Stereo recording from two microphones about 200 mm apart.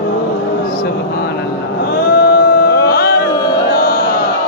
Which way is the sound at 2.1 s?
50° left (ahead or behind).